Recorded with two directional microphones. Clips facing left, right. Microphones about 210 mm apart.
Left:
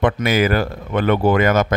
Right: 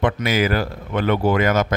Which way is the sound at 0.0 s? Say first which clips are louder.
Left 3 dB; 55° left (ahead or behind).